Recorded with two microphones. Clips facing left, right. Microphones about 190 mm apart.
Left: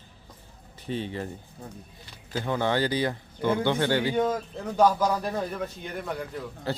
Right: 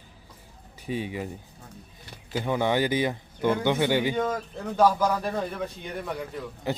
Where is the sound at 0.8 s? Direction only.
10° right (ahead or behind).